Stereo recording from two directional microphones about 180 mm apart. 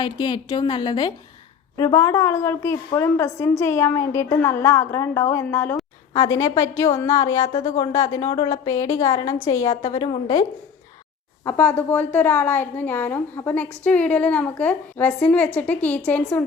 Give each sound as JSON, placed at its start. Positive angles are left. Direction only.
{"t": 0.0, "sound": "a woman's voice", "side_deg": 25}
{"t": 11.4, "sound": "a woman's voice", "side_deg": 10}